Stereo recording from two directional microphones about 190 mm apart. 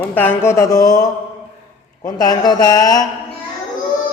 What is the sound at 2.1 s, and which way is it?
Speech, 20° left (ahead or behind).